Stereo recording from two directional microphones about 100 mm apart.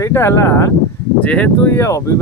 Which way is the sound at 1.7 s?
30° left (ahead or behind).